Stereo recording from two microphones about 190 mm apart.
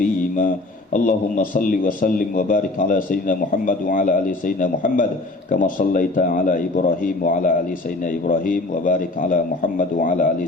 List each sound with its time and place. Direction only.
0.9 s a man's voice: 45° left (ahead or behind)